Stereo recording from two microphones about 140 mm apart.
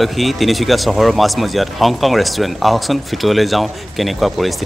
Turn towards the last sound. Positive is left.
turn(degrees=0)  # may be behind; listen again after turning